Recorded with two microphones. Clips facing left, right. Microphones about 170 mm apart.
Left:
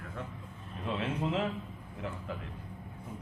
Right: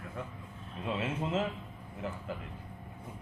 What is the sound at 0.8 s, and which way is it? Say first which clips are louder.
A man's voice: left 1 dB; 5° right (ahead or behind).